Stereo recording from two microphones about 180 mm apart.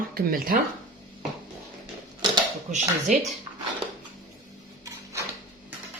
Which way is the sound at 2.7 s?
40° right (ahead or behind).